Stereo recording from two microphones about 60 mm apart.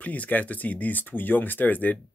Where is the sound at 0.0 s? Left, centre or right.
Left.